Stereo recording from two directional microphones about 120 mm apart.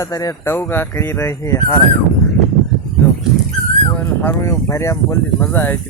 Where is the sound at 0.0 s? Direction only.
30° left (ahead or behind).